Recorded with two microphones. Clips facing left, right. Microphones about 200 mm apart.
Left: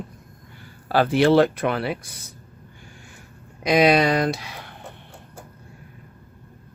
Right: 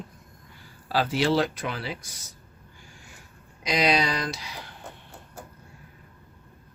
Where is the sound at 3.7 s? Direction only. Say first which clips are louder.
Left 7 dB; 55° left (ahead or behind).